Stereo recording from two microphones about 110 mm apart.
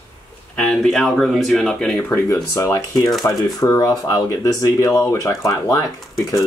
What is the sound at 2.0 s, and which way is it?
Speech, 25° left (ahead or behind).